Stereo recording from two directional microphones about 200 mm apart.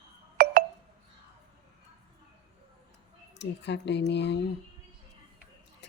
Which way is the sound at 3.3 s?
60° left (ahead or behind).